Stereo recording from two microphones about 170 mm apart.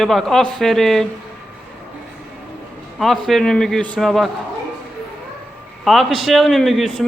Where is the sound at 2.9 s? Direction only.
Centre (ahead or behind).